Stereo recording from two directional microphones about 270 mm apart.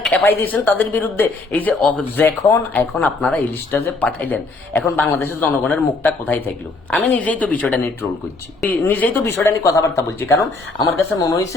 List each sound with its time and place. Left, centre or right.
0.0 s speech: centre